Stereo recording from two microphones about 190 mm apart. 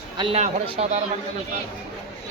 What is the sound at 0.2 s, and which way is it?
Speech, 30° right (ahead or behind).